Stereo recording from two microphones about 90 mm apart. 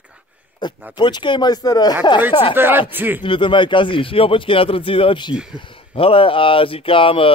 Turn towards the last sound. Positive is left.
turn(degrees=80)